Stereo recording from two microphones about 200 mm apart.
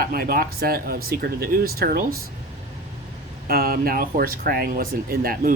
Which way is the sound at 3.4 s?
50° right (ahead or behind).